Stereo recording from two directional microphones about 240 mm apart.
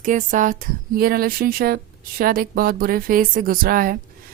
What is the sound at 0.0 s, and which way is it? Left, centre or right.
Speech, right.